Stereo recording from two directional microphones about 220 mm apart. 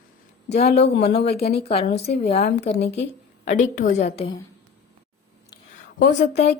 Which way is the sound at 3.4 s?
35° left (ahead or behind).